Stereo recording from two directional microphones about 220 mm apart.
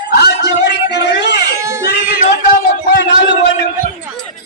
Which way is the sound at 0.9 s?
50° left (ahead or behind).